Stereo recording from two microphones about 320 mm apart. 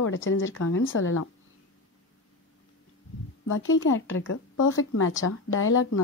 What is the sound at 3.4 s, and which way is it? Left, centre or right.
Speech, left.